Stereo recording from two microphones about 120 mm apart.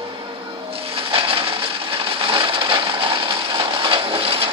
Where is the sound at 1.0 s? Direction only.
50° right (ahead or behind).